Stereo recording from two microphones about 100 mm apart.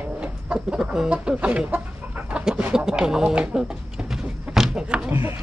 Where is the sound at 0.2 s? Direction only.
10° right (ahead or behind).